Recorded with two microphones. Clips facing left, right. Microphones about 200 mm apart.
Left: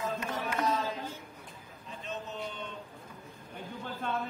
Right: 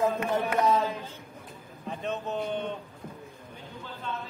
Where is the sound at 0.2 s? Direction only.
60° right (ahead or behind).